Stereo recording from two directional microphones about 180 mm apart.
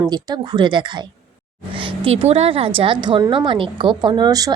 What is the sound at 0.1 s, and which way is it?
A woman's voice, 25° right (ahead or behind).